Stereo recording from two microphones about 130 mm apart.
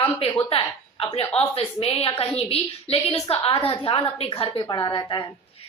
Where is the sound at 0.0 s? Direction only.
40° left (ahead or behind).